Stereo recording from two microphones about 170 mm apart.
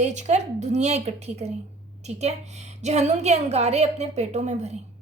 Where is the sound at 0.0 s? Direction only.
45° right (ahead or behind).